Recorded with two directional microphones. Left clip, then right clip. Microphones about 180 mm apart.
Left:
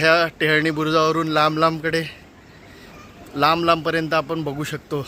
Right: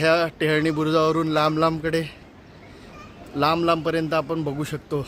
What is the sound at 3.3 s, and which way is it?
A man's voice, 5° right (ahead or behind).